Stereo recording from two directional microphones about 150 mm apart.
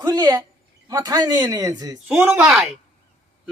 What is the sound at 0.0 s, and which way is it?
Speech, 30° right (ahead or behind).